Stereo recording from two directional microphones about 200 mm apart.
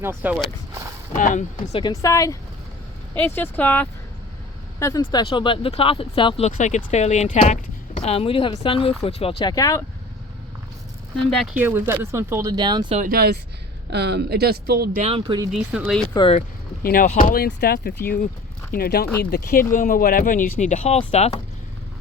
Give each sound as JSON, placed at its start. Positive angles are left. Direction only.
{"t": 0.0, "sound": "speech", "side_deg": -10}
{"t": 1.1, "sound": "speech", "side_deg": 40}
{"t": 1.8, "sound": "speech", "side_deg": 15}
{"t": 11.5, "sound": "speech", "side_deg": -10}
{"t": 13.0, "sound": "speech", "side_deg": -50}
{"t": 15.0, "sound": "speech", "side_deg": -25}
{"t": 15.5, "sound": "speech", "side_deg": -5}
{"t": 16.0, "sound": "speech", "side_deg": 30}
{"t": 16.8, "sound": "speech", "side_deg": 45}